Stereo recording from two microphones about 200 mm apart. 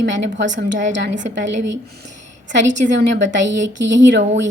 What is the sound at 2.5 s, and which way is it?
A woman's voice, 65° right (ahead or behind).